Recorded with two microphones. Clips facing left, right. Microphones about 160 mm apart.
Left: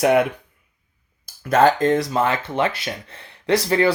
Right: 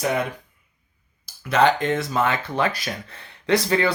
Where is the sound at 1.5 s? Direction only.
45° left (ahead or behind).